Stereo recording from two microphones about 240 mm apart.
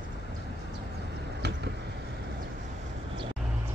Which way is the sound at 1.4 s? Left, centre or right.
Right.